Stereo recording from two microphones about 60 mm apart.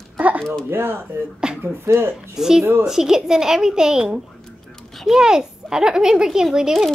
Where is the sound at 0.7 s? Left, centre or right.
Right.